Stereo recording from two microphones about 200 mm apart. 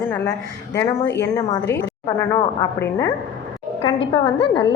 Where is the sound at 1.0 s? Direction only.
60° left (ahead or behind).